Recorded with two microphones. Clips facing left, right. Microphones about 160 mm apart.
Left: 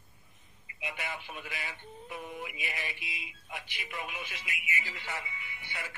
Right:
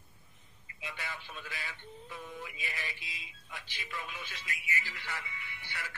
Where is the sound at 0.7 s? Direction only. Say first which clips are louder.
Left 4 dB; 20° left (ahead or behind).